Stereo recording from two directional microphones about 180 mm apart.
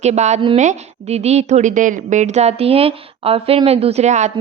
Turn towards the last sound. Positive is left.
turn(degrees=-40)  # may be behind; listen again after turning